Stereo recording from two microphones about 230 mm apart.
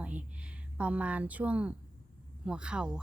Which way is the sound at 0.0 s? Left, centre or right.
Centre.